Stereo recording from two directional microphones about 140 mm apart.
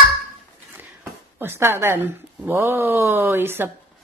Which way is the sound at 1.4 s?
15° right (ahead or behind).